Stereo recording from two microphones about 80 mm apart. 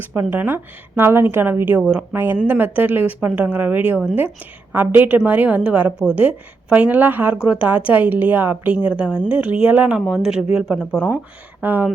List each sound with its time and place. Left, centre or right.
0.0 s a woman's voice: right
2.1 s a woman's voice: right; by 11.0 s centre
11.6 s a woman's voice: right